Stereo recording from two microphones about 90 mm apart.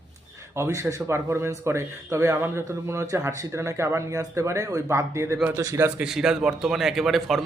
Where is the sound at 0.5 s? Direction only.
30° right (ahead or behind).